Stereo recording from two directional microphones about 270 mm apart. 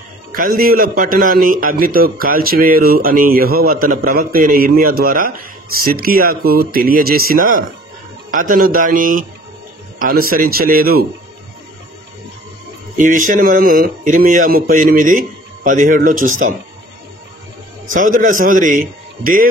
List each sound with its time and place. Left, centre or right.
0.3 s a man's voice: right
12.9 s a man's voice: right
17.9 s a man's voice: right